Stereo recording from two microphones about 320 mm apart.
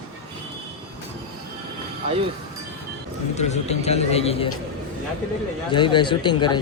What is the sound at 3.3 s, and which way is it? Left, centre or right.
A man's voice, centre.